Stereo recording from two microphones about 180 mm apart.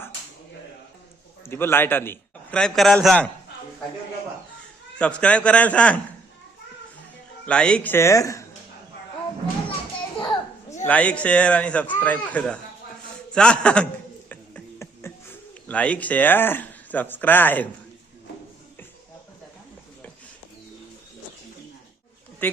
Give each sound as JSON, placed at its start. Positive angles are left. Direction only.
{"t": 1.5, "sound": "a man's voice", "side_deg": 10}
{"t": 4.9, "sound": "a man's voice", "side_deg": 5}
{"t": 7.4, "sound": "a man's voice", "side_deg": 5}
{"t": 10.2, "sound": "children playing", "side_deg": 25}
{"t": 10.8, "sound": "a man's voice", "side_deg": 10}
{"t": 14.3, "sound": "a sound", "side_deg": 10}